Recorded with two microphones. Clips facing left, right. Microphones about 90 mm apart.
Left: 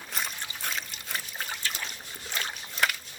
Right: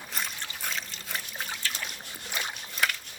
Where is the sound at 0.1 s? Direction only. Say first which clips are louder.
Left 1 dB; centre (ahead or behind).